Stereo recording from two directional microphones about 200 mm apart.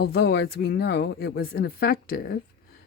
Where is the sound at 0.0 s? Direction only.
55° left (ahead or behind).